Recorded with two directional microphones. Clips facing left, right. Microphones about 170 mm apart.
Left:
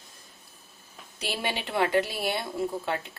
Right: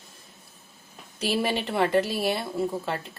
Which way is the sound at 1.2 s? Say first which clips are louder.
Right 6 dB; centre (ahead or behind).